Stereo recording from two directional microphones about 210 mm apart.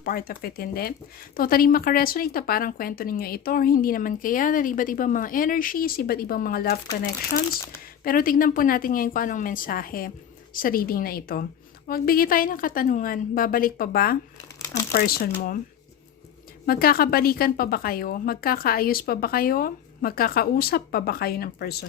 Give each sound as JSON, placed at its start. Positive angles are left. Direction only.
{"t": 0.0, "sound": "speech", "side_deg": 45}
{"t": 16.6, "sound": "speech", "side_deg": 45}